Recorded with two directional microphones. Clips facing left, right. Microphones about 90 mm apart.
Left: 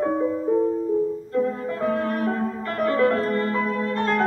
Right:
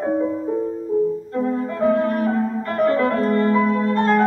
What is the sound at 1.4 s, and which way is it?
Music, 30° right (ahead or behind).